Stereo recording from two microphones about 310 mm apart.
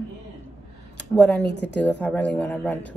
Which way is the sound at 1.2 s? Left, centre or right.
Centre.